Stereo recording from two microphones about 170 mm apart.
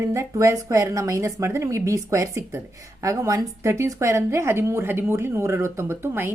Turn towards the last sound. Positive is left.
turn(degrees=-15)  # may be behind; listen again after turning